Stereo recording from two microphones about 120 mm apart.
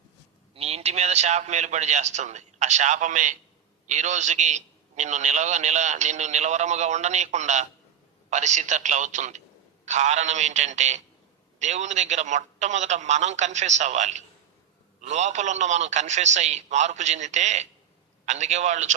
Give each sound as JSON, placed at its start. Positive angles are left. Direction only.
{"t": 0.5, "sound": "a man's voice", "side_deg": -60}